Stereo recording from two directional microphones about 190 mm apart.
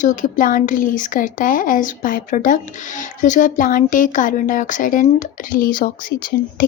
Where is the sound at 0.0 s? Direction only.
40° left (ahead or behind).